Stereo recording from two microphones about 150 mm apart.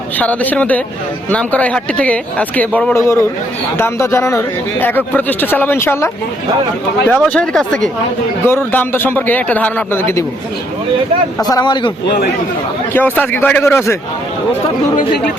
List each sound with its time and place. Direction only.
0.2 s speech: 10° left (ahead or behind)
8.4 s speech: 15° left (ahead or behind)
11.4 s a man's voice: 25° left (ahead or behind)
12.9 s speech: 10° left (ahead or behind)